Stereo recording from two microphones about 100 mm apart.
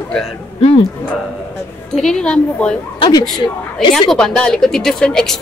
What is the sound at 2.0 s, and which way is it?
Speech, 5° left (ahead or behind).